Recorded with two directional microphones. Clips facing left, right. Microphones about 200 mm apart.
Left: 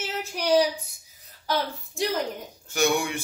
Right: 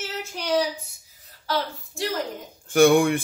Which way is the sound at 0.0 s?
15° left (ahead or behind).